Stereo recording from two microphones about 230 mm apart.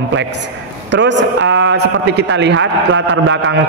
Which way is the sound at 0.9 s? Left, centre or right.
Right.